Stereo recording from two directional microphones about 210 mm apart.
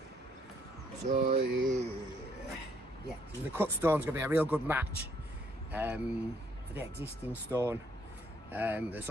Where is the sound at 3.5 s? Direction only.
10° right (ahead or behind).